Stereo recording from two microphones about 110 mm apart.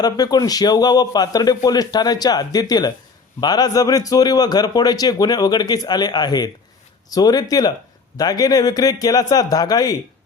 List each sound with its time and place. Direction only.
0.0 s a man's voice: 35° left (ahead or behind)